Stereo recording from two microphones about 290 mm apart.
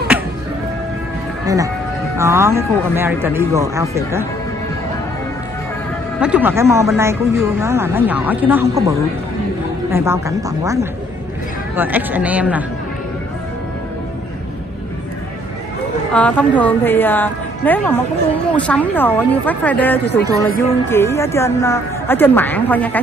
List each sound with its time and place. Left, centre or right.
1.4 s speech: centre
6.2 s a woman's voice: centre
16.1 s a woman's voice: centre